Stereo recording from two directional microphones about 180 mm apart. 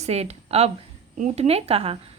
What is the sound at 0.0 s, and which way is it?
A woman's voice, 35° right (ahead or behind).